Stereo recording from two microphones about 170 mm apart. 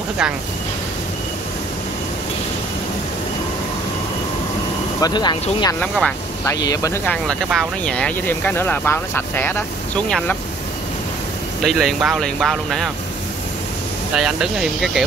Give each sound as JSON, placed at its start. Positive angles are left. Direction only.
{"t": 5.0, "sound": "speech", "side_deg": 25}
{"t": 5.8, "sound": "speech", "side_deg": 5}
{"t": 6.4, "sound": "speech", "side_deg": 20}
{"t": 7.4, "sound": "speech", "side_deg": 5}
{"t": 11.6, "sound": "speech", "side_deg": 0}
{"t": 14.1, "sound": "speech", "side_deg": -5}